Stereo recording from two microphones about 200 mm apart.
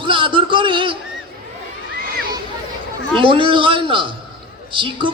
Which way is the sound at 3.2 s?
25° right (ahead or behind).